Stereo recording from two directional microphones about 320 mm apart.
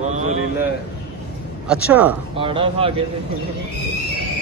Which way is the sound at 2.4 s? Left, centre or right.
Centre.